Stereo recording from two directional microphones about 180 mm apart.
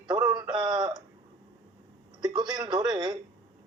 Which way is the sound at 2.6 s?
25° right (ahead or behind).